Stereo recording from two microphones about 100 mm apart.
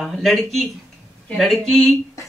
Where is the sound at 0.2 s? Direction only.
Centre (ahead or behind).